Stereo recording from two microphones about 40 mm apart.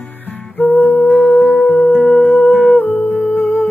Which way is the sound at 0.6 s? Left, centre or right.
Left.